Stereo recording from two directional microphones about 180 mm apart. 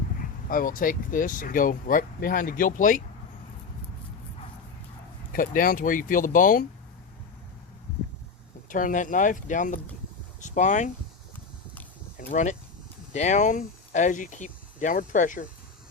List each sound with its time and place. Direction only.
0.2 s speech: 50° left (ahead or behind)
5.3 s speech: 50° left (ahead or behind)
8.7 s speech: 45° left (ahead or behind)
12.1 s speech: 45° left (ahead or behind)